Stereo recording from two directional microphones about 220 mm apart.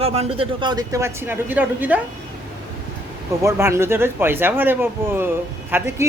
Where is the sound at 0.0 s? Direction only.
25° right (ahead or behind); by 2.0 s 10° right (ahead or behind).